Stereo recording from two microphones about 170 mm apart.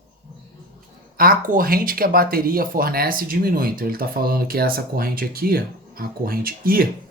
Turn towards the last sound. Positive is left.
turn(degrees=-60)  # may be behind; listen again after turning